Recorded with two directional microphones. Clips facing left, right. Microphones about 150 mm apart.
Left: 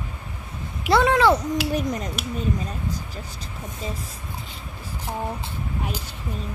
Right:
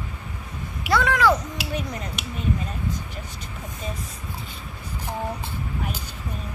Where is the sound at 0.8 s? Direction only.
30° left (ahead or behind).